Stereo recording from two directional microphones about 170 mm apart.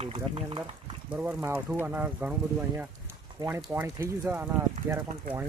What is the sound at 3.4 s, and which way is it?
Speech, 15° right (ahead or behind).